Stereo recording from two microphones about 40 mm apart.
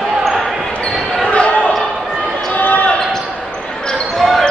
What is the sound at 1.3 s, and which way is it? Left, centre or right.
Basketball bounce, left.